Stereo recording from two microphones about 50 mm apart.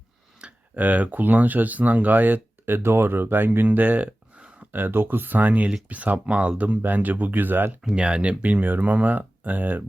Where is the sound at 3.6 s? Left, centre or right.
Right.